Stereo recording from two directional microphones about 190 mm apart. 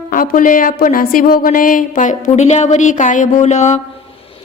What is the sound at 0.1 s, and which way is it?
A woman's voice, 45° left (ahead or behind).